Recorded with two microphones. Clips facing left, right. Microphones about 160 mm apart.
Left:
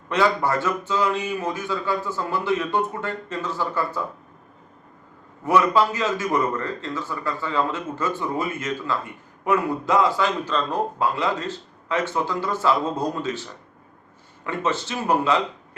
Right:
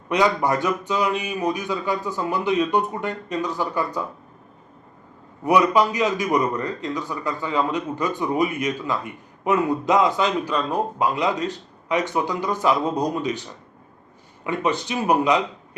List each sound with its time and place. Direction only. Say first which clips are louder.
0.1 s a man's voice: right 1 dB; 15° right (ahead or behind)
5.5 s a man's voice: right 1 dB; 15° right (ahead or behind)